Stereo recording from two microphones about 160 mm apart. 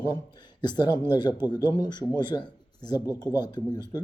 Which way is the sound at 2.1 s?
25° left (ahead or behind).